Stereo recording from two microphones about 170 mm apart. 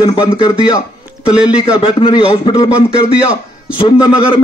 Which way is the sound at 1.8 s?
35° left (ahead or behind).